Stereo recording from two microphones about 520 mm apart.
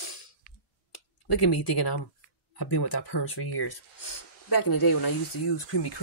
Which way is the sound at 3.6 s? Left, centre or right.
Left.